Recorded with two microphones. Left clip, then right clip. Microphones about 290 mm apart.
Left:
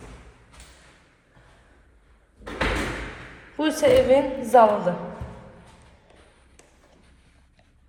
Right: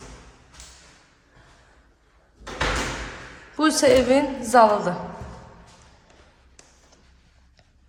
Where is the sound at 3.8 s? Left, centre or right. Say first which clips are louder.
Left 1 dB; right.